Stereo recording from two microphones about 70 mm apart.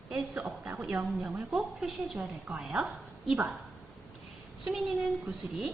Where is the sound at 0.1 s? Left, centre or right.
Centre.